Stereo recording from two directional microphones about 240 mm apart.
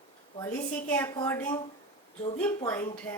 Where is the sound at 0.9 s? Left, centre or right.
Centre.